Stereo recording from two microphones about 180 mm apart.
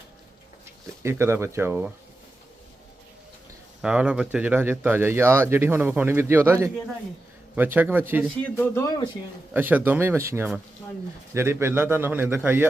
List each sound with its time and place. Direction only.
1.0 s speech: 15° right (ahead or behind)
3.8 s speech: 5° right (ahead or behind)
8.6 s speech: 15° left (ahead or behind)
9.5 s speech: 10° right (ahead or behind)